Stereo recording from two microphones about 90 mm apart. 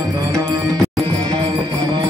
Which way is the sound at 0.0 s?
45° right (ahead or behind).